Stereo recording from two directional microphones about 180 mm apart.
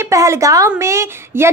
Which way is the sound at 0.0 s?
15° right (ahead or behind).